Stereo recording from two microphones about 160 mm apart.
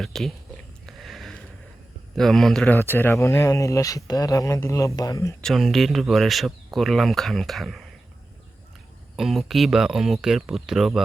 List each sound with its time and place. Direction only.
0.0 s speech: centre (ahead or behind)
0.9 s sniff: centre (ahead or behind)
2.1 s speech: centre (ahead or behind)
2.7 s speech: 15° left (ahead or behind)
5.4 s speech: centre (ahead or behind)
9.1 s speech: centre (ahead or behind)